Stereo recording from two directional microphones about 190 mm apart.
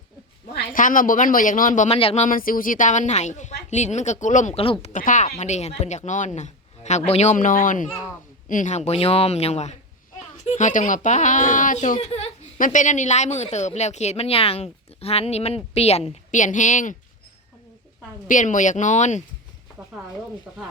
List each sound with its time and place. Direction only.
0.5 s a man's voice: 45° left (ahead or behind)
18.3 s speech: 40° left (ahead or behind)